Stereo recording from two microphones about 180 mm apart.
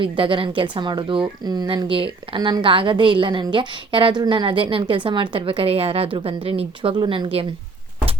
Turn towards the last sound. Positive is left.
turn(degrees=-30)  # may be behind; listen again after turning